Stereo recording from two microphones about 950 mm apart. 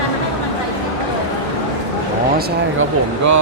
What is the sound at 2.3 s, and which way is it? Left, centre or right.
Speech, centre.